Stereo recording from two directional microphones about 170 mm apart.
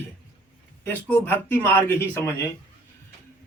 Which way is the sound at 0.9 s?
10° left (ahead or behind).